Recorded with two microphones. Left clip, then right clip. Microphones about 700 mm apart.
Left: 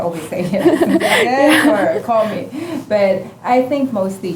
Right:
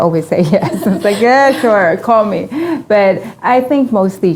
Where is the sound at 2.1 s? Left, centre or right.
Right.